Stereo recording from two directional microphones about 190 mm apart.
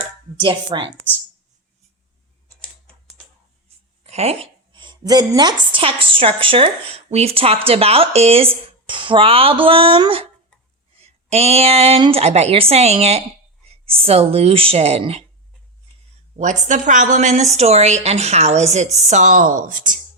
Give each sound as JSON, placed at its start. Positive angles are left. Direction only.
{"t": 0.3, "sound": "speech", "side_deg": -25}
{"t": 4.0, "sound": "a woman's voice", "side_deg": -35}
{"t": 16.4, "sound": "a woman's voice", "side_deg": -40}